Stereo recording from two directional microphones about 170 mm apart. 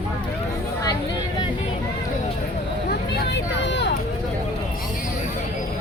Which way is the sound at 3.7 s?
90° left.